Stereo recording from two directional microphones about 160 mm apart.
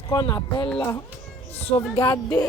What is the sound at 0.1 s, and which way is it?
Speech, 25° left (ahead or behind).